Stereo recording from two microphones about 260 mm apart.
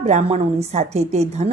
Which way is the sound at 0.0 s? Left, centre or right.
Right.